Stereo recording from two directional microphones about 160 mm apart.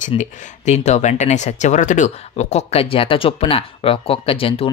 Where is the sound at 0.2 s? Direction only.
50° left (ahead or behind).